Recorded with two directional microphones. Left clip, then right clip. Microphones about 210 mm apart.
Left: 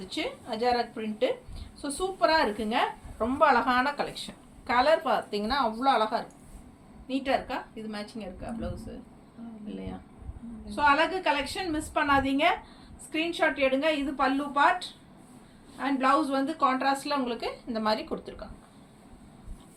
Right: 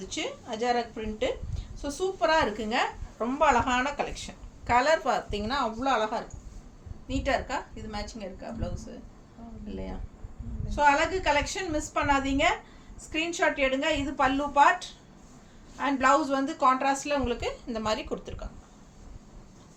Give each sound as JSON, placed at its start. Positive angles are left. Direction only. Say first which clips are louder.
{"t": 0.1, "sound": "a woman's voice", "louder": "left 1 dB", "side_deg": -10}
{"t": 15.8, "sound": "a woman's voice", "louder": "right 2 dB", "side_deg": -15}